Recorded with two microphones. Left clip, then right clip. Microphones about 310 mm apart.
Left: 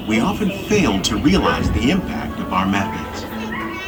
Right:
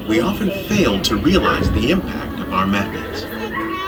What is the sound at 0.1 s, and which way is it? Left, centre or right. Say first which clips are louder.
Speech: right 2 dB; left.